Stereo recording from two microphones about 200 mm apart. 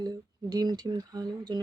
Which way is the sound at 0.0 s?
20° right (ahead or behind).